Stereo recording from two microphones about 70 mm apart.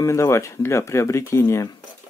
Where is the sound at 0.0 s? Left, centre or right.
Left.